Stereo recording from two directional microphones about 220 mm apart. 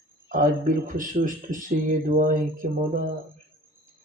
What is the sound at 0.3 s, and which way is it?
Speech, 40° right (ahead or behind).